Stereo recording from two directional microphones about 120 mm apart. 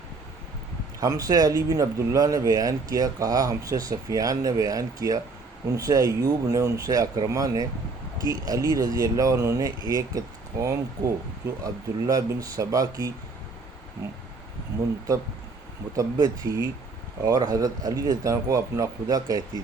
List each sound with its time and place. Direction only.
0.9 s speech: 30° right (ahead or behind)
16.0 s speech: 30° right (ahead or behind)